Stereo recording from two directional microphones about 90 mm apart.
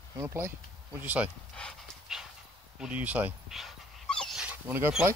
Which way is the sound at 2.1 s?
5° right (ahead or behind).